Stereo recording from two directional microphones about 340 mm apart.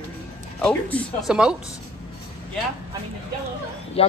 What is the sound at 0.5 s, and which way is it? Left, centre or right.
Speech, centre.